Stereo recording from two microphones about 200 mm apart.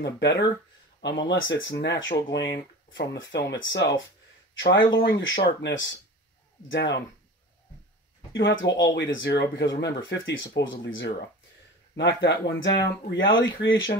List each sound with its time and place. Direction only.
0.0 s speech: 60° left (ahead or behind)
8.4 s speech: 60° left (ahead or behind)